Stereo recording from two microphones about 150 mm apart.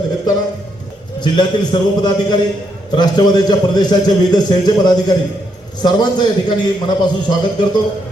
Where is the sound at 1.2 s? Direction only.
30° left (ahead or behind).